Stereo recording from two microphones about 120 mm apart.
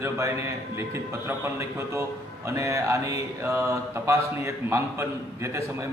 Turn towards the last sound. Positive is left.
turn(degrees=-25)  # may be behind; listen again after turning